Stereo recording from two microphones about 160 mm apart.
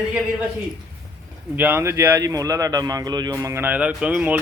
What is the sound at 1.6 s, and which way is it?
A man's voice, 15° right (ahead or behind).